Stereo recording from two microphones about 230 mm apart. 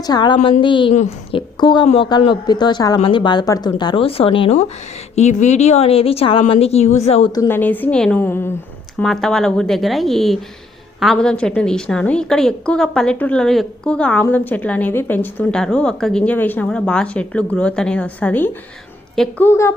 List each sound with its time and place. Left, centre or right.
0.0 s a woman's voice: centre
7.3 s a woman's voice: centre